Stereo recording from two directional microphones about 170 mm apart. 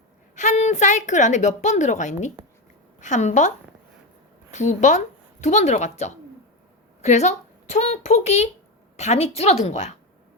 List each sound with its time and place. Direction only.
0.3 s a woman's voice: 45° left (ahead or behind)
4.5 s a woman's voice: 45° left (ahead or behind)